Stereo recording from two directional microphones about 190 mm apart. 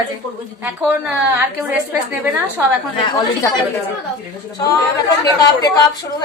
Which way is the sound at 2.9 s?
25° left (ahead or behind).